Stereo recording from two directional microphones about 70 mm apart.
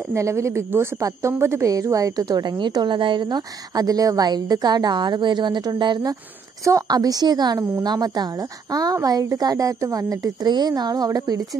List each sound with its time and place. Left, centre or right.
0.1 s a woman's voice: right
6.9 s a woman's voice: right